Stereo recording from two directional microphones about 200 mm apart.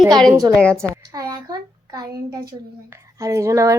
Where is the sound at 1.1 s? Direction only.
20° right (ahead or behind).